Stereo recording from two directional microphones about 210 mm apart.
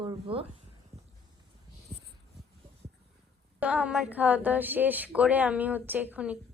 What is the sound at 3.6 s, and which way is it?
A woman's voice, 5° right (ahead or behind).